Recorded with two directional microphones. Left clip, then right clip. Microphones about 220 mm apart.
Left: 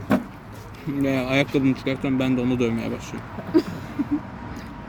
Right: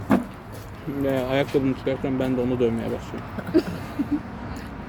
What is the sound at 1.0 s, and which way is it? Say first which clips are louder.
Speech: even; 50° left (ahead or behind).